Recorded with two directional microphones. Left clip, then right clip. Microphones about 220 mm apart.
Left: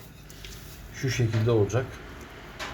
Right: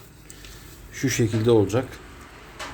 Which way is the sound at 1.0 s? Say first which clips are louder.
Right 6 dB; 50° right (ahead or behind).